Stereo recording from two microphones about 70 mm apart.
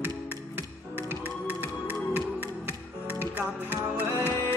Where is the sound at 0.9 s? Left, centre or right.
Right.